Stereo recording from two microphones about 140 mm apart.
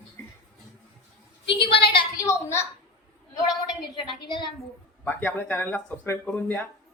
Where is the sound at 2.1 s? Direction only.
20° left (ahead or behind).